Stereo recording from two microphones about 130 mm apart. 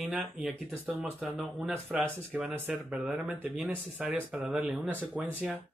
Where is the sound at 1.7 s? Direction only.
15° right (ahead or behind).